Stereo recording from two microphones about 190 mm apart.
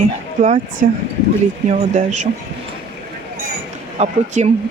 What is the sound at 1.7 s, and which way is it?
Speech, 40° right (ahead or behind).